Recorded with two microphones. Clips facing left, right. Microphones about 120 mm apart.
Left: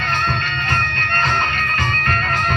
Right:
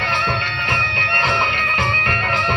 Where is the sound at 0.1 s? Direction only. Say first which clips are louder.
Left 2 dB; 65° right (ahead or behind).